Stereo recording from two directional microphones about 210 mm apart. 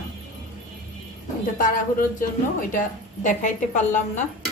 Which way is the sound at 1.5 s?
40° left (ahead or behind).